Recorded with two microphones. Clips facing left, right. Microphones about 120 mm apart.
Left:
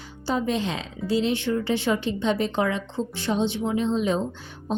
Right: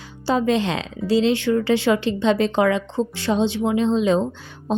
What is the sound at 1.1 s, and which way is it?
Speech, 90° right.